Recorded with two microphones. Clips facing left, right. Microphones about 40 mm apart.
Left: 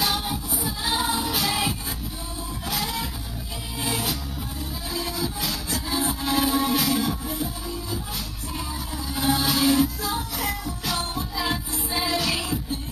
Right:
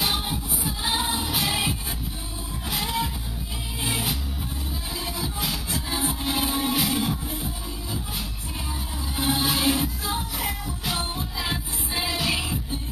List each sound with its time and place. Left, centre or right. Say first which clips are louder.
0.0 s music: left 1 dB; right
9.1 s music: left 1 dB; right
11.3 s music: left 5 dB; centre